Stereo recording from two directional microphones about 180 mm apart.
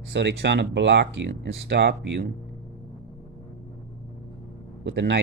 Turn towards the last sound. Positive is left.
turn(degrees=-75)  # may be behind; listen again after turning